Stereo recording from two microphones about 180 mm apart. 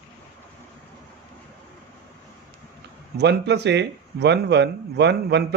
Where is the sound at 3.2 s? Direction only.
70° right (ahead or behind).